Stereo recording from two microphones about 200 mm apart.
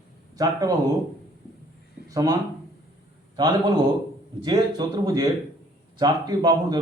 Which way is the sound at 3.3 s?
20° right (ahead or behind).